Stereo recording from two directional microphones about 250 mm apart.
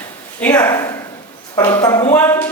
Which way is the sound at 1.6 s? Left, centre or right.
Centre.